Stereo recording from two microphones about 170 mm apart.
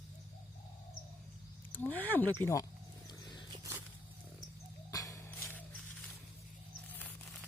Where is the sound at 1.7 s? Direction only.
10° left (ahead or behind).